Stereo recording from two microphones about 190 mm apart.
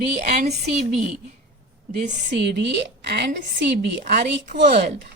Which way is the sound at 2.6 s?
65° right (ahead or behind).